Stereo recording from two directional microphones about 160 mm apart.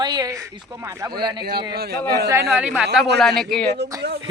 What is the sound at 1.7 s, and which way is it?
Speech, 75° right (ahead or behind).